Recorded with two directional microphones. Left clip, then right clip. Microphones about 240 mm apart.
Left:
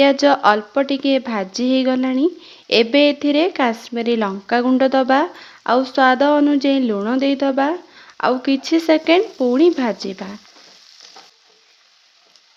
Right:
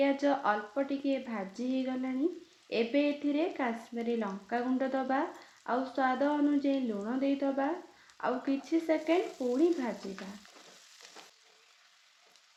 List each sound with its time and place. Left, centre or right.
0.0 s speech: left